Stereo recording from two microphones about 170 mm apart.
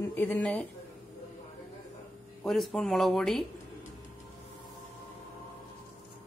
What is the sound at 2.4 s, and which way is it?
Speech, centre (ahead or behind).